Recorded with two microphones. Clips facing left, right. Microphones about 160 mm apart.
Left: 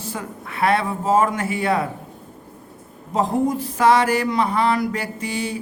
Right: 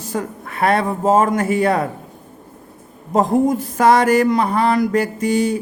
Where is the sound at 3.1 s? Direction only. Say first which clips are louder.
Right 5 dB; 45° right (ahead or behind).